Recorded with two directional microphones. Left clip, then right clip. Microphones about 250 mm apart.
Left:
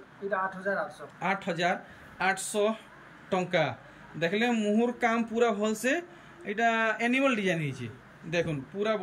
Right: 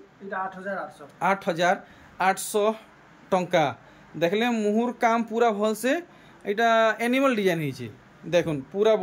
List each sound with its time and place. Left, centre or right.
1.2 s speech: centre